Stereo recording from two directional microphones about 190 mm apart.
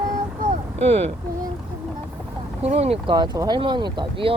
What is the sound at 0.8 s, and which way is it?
Speech, 35° right (ahead or behind).